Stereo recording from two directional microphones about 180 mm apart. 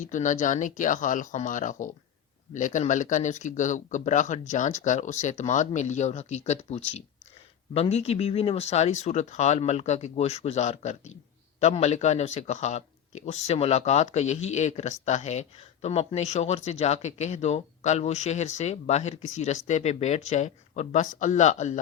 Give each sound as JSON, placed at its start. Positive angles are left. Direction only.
{"t": 0.0, "sound": "speech", "side_deg": 45}